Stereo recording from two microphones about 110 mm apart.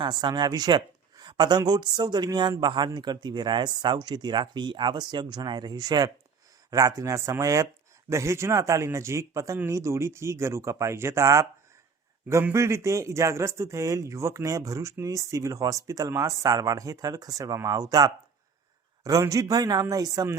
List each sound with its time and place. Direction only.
0.0 s speech: 40° right (ahead or behind)
12.5 s speech: 25° right (ahead or behind)